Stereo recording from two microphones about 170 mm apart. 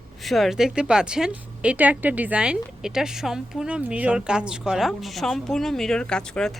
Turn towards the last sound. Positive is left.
turn(degrees=5)  # may be behind; listen again after turning